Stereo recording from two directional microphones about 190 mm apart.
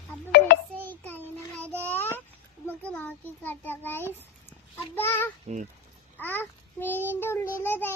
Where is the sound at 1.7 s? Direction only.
10° left (ahead or behind).